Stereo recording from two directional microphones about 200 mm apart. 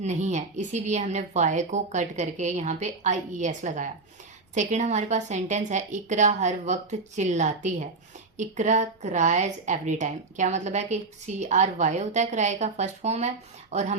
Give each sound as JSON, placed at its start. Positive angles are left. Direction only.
{"t": 0.0, "sound": "a woman's voice", "side_deg": -35}